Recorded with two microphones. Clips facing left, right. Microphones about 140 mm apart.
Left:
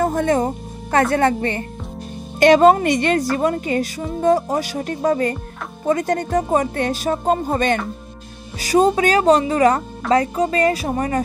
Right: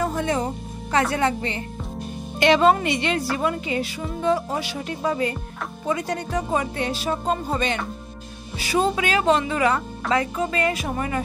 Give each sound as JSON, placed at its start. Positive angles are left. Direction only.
{"t": 0.0, "sound": "music", "side_deg": 50}
{"t": 1.1, "sound": "speech", "side_deg": 50}